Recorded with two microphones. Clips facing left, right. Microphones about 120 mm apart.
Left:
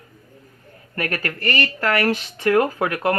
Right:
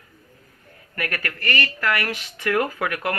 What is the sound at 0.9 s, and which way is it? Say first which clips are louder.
Speech: left 3 dB; 30° left (ahead or behind).